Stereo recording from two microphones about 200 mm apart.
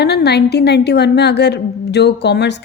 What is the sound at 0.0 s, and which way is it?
A woman's voice, 55° left (ahead or behind).